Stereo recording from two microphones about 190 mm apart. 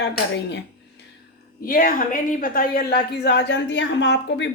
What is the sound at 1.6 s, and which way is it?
A woman's voice, 50° left (ahead or behind).